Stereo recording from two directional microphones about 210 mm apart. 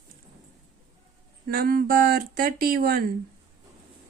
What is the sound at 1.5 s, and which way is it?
Speech, 45° right (ahead or behind).